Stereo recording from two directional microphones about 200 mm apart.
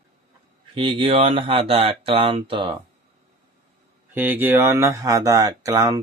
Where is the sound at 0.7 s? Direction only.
25° right (ahead or behind).